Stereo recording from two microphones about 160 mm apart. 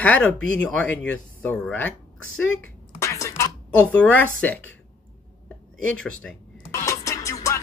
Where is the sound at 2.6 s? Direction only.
20° left (ahead or behind).